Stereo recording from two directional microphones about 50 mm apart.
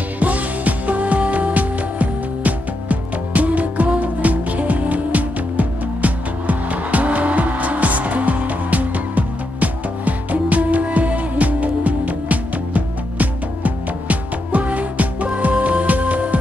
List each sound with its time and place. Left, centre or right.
0.2 s music: right